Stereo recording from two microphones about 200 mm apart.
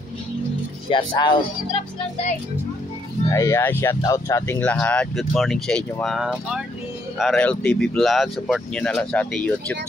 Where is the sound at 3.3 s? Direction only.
15° left (ahead or behind).